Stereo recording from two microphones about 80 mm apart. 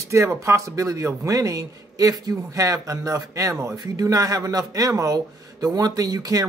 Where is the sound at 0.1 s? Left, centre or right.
Right.